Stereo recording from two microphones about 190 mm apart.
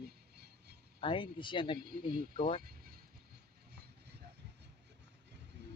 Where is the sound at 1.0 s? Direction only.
25° left (ahead or behind).